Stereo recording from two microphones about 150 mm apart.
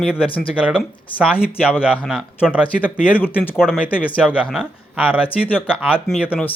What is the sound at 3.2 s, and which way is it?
Speech, 15° left (ahead or behind).